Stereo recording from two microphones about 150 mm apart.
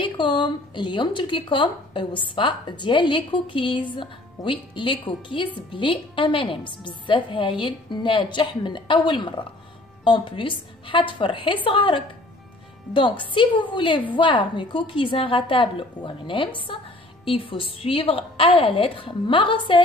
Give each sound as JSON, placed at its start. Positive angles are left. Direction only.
{"t": 0.0, "sound": "a woman's voice", "side_deg": 35}